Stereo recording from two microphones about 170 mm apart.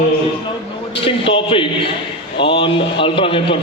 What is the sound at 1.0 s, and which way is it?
A man's voice, 30° left (ahead or behind).